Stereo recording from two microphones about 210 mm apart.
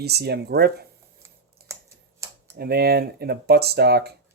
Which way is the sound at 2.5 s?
50° right (ahead or behind).